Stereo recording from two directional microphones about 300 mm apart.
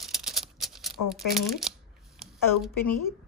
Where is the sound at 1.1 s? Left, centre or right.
Centre.